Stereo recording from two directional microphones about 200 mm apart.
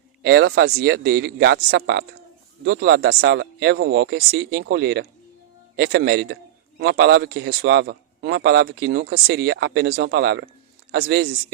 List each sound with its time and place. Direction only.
0.2 s a man's voice: 55° right (ahead or behind)